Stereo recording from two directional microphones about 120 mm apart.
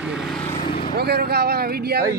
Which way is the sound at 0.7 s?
45° left (ahead or behind).